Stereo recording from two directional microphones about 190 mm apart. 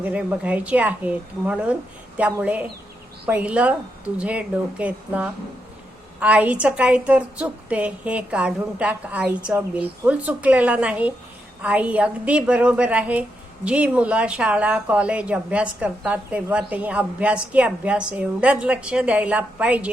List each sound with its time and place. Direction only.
0.0 s speech: 5° right (ahead or behind)